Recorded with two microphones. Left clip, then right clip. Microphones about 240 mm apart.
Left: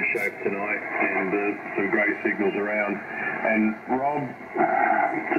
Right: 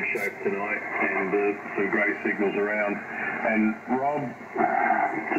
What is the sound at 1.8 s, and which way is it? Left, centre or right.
Speech, left.